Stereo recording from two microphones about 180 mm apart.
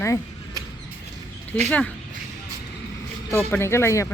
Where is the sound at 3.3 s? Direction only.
15° left (ahead or behind).